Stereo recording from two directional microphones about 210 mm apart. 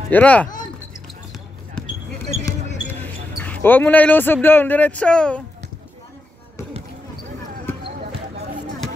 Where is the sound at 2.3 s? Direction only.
10° left (ahead or behind).